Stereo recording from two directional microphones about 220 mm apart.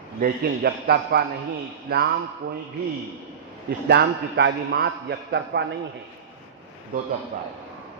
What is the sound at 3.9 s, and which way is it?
A man's voice, 50° right (ahead or behind).